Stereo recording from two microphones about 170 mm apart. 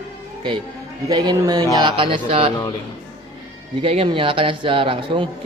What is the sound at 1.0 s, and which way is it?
A man's voice, 25° right (ahead or behind).